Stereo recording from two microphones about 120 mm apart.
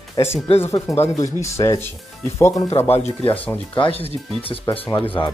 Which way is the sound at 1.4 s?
25° left (ahead or behind).